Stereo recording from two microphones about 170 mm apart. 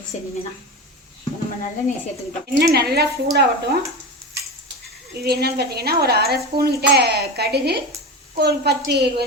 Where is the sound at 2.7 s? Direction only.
70° right (ahead or behind).